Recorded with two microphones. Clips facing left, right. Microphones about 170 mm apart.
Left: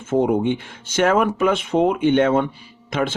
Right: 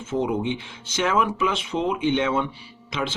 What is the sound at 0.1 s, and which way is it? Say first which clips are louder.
Speech: left 6 dB; 50° left (ahead or behind).